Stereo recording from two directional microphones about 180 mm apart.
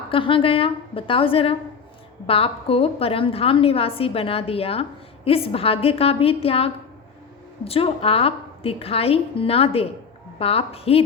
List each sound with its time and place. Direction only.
0.1 s a woman's voice: 30° left (ahead or behind)